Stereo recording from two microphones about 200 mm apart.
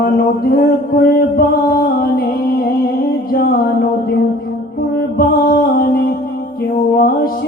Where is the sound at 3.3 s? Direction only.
50° left (ahead or behind).